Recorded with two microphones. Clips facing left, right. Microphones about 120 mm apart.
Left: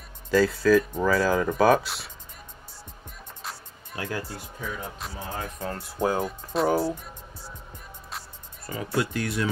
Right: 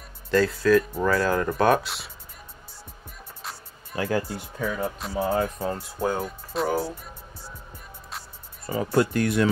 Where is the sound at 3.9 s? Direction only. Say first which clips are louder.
Right 7 dB; 35° right (ahead or behind).